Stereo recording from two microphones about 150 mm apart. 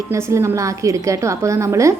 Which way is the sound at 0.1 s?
20° right (ahead or behind).